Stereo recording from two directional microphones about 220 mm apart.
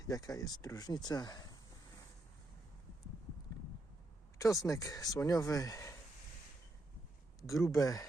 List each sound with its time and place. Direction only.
0.0 s speech: 15° left (ahead or behind)
4.4 s speech: 15° left (ahead or behind)
7.6 s speech: 15° left (ahead or behind)